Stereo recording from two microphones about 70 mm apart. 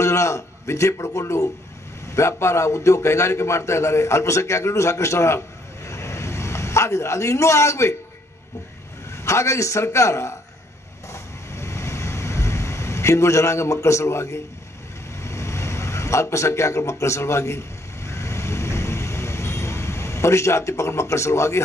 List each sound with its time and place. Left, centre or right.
0.0 s a man's voice: left
5.9 s vehicle: left
9.1 s a man's voice: left
11.1 s vehicle: left
15.1 s a sound: left